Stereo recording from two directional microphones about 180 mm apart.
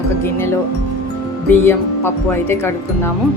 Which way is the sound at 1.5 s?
15° left (ahead or behind).